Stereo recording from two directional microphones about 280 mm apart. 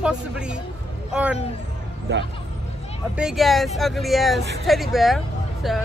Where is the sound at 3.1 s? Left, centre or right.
Centre.